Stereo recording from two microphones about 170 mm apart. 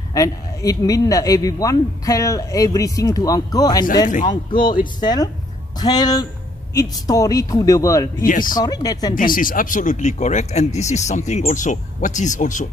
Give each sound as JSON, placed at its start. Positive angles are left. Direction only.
{"t": 0.1, "sound": "speech", "side_deg": 20}
{"t": 8.3, "sound": "speech", "side_deg": 55}
{"t": 8.5, "sound": "speech", "side_deg": 25}
{"t": 9.1, "sound": "speech", "side_deg": 55}